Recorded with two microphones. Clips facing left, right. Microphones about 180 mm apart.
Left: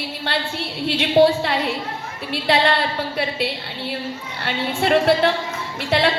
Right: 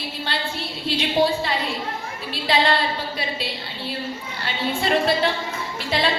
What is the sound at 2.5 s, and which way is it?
Speech, 65° left (ahead or behind).